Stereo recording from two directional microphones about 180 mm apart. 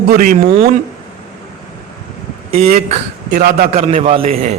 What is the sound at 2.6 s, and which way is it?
Speech, 40° right (ahead or behind).